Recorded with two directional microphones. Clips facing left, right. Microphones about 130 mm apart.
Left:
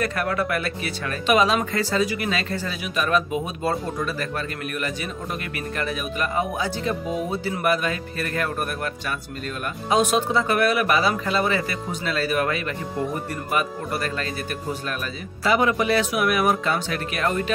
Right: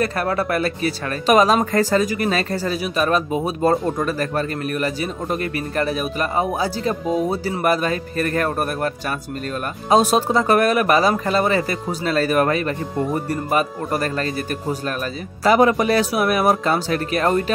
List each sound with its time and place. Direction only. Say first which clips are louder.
0.0 s speech: right 3 dB; 35° right (ahead or behind)
15.4 s speech: right 5 dB; 40° right (ahead or behind)